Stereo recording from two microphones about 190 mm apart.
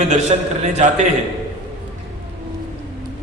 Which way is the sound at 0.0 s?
35° right (ahead or behind).